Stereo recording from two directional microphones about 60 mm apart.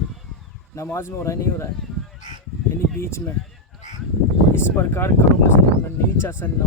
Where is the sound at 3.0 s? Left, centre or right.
Left.